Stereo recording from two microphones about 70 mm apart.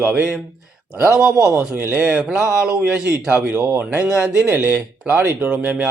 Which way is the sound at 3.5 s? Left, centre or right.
Right.